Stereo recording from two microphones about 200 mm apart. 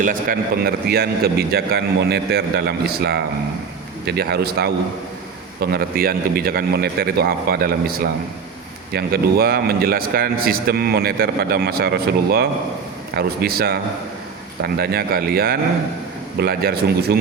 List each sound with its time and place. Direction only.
0.0 s a man's voice: 45° right (ahead or behind)